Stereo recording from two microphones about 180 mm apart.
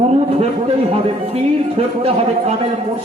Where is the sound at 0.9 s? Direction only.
35° right (ahead or behind).